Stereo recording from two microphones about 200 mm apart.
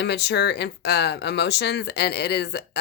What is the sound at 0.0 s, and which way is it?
Speech, 55° left (ahead or behind).